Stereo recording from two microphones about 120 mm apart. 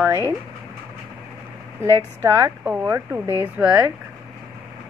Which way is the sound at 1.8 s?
25° right (ahead or behind).